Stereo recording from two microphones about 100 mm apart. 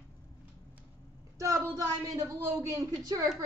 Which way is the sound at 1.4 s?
30° right (ahead or behind).